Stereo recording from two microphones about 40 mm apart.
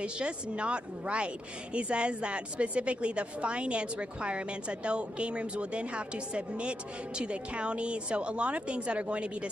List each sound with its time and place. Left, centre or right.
0.0 s a woman's voice: right